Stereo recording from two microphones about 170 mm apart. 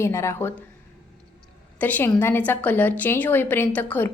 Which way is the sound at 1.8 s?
10° left (ahead or behind).